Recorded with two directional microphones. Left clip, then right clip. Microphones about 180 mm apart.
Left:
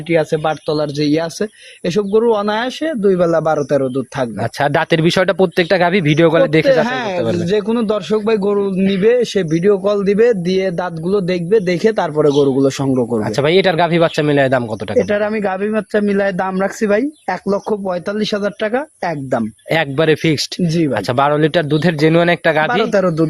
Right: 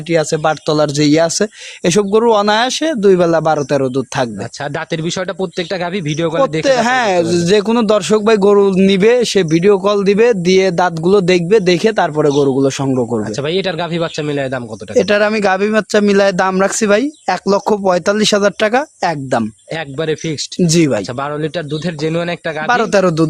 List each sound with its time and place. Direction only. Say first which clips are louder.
0.1 s speech: right 1 dB; 25° right (ahead or behind)
4.6 s speech: left 7 dB; 25° left (ahead or behind)
6.7 s speech: right 2 dB; 45° right (ahead or behind); by 13.1 s 10° right (ahead or behind)
13.3 s speech: left 5 dB; 25° left (ahead or behind)
14.9 s speech: right 4 dB; 25° right (ahead or behind)
17.7 s speech: right 6 dB; 45° right (ahead or behind)
19.0 s speech: right 3 dB; 20° right (ahead or behind)
19.7 s a man's voice: left 6 dB; 30° left (ahead or behind)
20.7 s speech: right 6 dB; 40° right (ahead or behind)
20.9 s a man's voice: left 4 dB; 35° left (ahead or behind)
22.7 s speech: right 2 dB; 20° right (ahead or behind)